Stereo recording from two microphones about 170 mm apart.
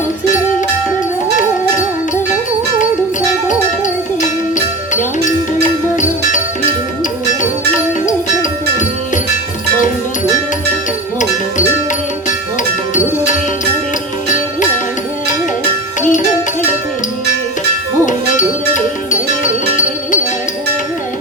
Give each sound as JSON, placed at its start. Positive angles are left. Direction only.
{"t": 3.5, "sound": "music", "side_deg": 50}
{"t": 8.0, "sound": "music", "side_deg": 50}
{"t": 16.0, "sound": "music", "side_deg": 50}
{"t": 18.7, "sound": "music", "side_deg": 50}